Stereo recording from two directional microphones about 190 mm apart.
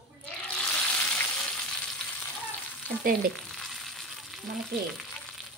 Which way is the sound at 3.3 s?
5° left (ahead or behind).